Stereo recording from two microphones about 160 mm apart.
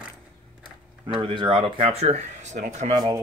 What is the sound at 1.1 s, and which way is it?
Speech, 30° right (ahead or behind).